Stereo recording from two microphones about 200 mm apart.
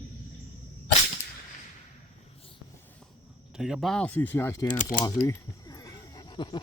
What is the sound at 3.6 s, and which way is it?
Speech, centre (ahead or behind).